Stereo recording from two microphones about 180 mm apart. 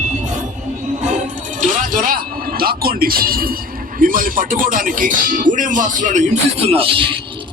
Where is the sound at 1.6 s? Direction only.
50° right (ahead or behind).